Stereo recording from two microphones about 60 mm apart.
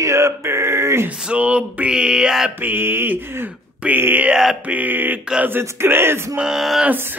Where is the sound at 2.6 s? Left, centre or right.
Right.